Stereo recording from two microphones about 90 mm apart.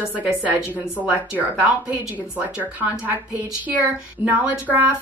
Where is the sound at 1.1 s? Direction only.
20° right (ahead or behind).